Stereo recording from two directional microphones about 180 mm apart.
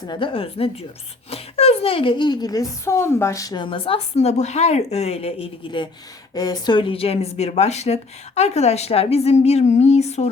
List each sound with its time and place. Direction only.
0.1 s a woman's voice: 30° left (ahead or behind)